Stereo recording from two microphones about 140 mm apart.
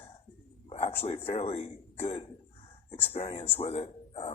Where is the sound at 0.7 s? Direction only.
45° left (ahead or behind).